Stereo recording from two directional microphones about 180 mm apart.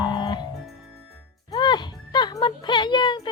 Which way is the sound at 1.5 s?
25° left (ahead or behind).